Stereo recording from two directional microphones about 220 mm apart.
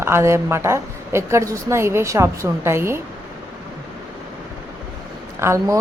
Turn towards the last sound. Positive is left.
turn(degrees=-10)  # may be behind; listen again after turning